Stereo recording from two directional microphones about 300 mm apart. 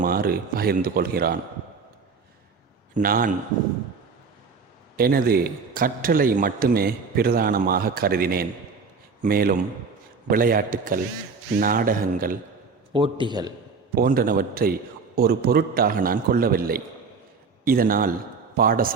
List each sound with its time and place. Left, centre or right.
0.0 s speech: right
2.9 s a man's voice: right
4.9 s a man's voice: right
12.9 s a man's voice: centre
13.9 s a man's voice: right